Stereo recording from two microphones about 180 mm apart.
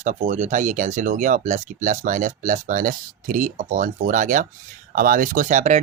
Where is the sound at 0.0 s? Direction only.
40° right (ahead or behind).